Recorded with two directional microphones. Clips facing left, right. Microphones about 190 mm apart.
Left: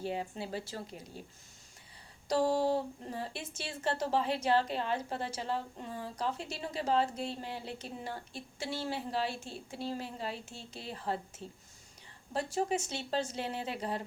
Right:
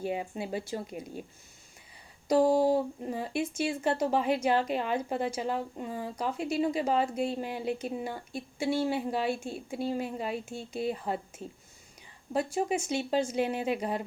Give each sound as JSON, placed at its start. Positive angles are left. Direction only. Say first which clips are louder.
{"t": 0.0, "sound": "a woman's voice", "louder": "right 4 dB", "side_deg": -15}
{"t": 2.2, "sound": "a woman's voice", "louder": "right 6 dB", "side_deg": -15}
{"t": 12.3, "sound": "a woman's voice", "louder": "right 4 dB", "side_deg": -15}